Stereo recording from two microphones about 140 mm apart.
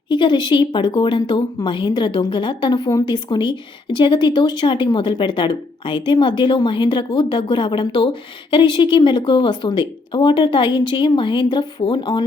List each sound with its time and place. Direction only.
0.1 s a woman's voice: 35° left (ahead or behind)